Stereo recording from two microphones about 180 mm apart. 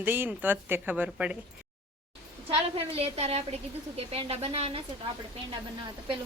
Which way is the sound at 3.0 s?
35° right (ahead or behind).